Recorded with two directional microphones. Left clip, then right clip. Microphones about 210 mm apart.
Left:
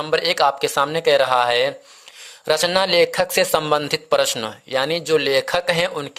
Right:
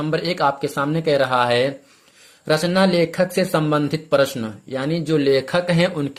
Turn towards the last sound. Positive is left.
turn(degrees=25)  # may be behind; listen again after turning